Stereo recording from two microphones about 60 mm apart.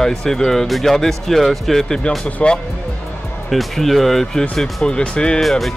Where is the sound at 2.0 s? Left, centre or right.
Centre.